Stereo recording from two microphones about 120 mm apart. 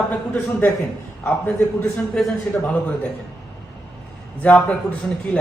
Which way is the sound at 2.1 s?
5° left (ahead or behind).